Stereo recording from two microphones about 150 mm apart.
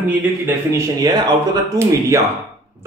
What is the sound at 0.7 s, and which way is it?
A man's voice, 25° right (ahead or behind).